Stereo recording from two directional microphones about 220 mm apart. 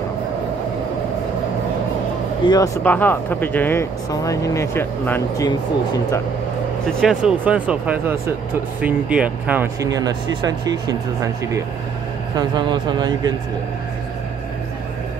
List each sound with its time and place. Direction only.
2.4 s speech: 15° left (ahead or behind)
7.0 s speech: centre (ahead or behind); by 11.0 s 15° right (ahead or behind)
12.4 s speech: 20° right (ahead or behind)